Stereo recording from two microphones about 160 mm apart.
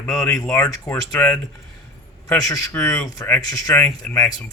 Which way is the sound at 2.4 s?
20° left (ahead or behind).